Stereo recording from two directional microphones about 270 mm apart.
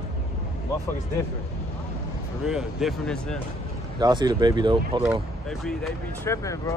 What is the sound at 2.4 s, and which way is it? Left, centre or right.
Speech, centre.